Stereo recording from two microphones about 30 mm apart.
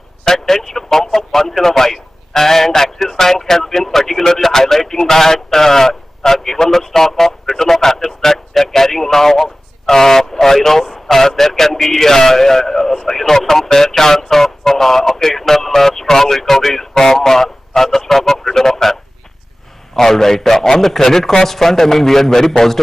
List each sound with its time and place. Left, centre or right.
0.2 s a man's voice: centre
20.0 s a man's voice: centre